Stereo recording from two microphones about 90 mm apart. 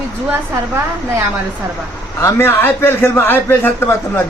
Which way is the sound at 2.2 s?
25° left (ahead or behind).